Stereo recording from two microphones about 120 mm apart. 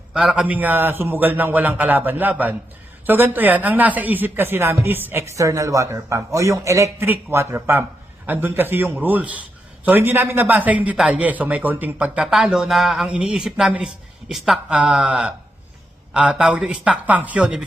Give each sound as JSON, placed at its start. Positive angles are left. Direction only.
{"t": 0.1, "sound": "a man's voice", "side_deg": -5}